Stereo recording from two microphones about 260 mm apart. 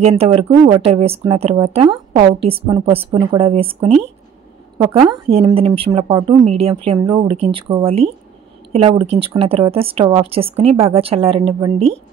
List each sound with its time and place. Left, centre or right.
0.0 s a woman's voice: right